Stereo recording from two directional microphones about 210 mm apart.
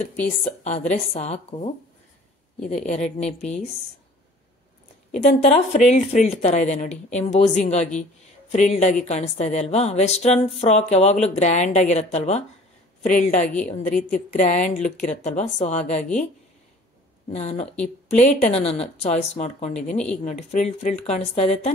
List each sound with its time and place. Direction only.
0.0 s speech: 35° left (ahead or behind)
2.7 s speech: 30° left (ahead or behind)
5.4 s speech: 30° left (ahead or behind)
17.3 s speech: 30° left (ahead or behind)